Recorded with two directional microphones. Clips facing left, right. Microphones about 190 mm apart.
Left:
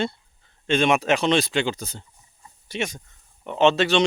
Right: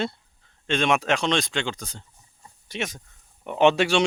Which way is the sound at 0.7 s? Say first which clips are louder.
Left 3 dB; centre (ahead or behind).